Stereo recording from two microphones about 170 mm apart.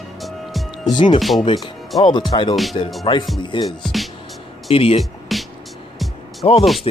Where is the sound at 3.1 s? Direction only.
30° left (ahead or behind).